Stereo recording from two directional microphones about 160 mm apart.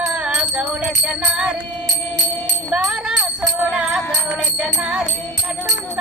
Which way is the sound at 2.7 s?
5° right (ahead or behind).